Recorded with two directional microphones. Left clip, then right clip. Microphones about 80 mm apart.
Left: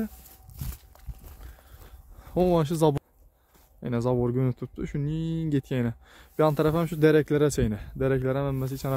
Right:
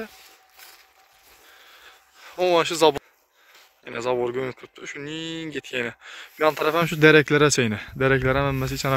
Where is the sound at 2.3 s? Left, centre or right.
Left.